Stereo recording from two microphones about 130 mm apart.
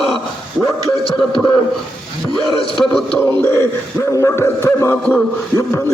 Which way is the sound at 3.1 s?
15° left (ahead or behind).